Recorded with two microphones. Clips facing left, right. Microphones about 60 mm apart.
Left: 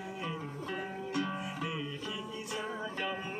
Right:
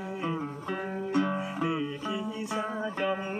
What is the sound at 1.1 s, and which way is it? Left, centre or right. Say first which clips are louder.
Music: right 8 dB; right.